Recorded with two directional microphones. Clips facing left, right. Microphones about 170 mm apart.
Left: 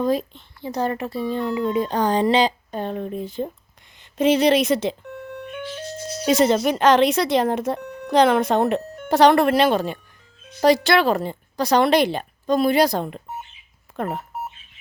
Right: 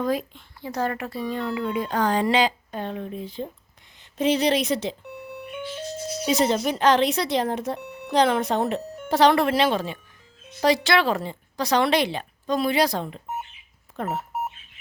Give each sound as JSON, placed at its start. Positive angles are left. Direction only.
{"t": 0.0, "sound": "speech", "side_deg": 25}
{"t": 2.7, "sound": "speech", "side_deg": 40}
{"t": 4.2, "sound": "speech", "side_deg": 75}
{"t": 6.2, "sound": "speech", "side_deg": 60}